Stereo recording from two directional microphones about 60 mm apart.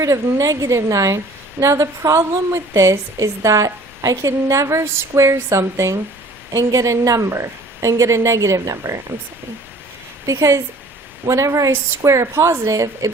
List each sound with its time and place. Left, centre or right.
0.0 s a woman's voice: right
4.3 s a woman's voice: right
6.5 s a woman's voice: right
10.2 s a woman's voice: right
12.7 s a woman's voice: right